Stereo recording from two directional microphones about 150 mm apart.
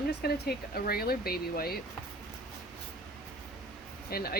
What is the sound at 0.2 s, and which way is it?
Speech, 90° left.